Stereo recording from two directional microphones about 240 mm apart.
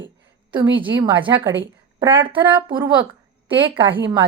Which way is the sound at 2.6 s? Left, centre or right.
Centre.